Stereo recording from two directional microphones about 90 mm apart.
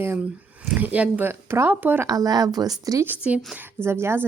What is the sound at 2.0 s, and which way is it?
Speech, 45° right (ahead or behind).